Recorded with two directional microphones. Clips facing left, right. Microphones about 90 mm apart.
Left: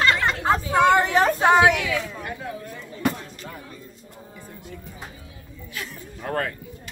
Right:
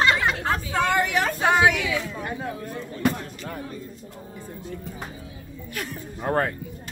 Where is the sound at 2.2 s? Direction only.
30° right (ahead or behind).